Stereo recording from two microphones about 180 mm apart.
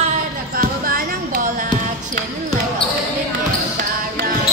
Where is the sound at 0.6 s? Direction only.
55° right (ahead or behind).